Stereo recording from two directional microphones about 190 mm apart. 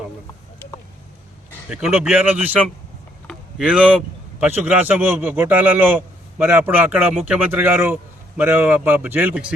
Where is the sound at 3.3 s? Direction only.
5° right (ahead or behind).